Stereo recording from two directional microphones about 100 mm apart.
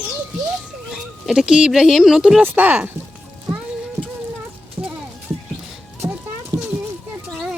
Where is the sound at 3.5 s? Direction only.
15° right (ahead or behind).